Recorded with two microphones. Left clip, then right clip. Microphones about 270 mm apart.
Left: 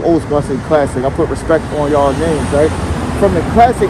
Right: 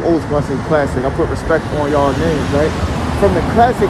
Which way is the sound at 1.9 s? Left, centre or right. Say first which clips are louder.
Left 3 dB; left.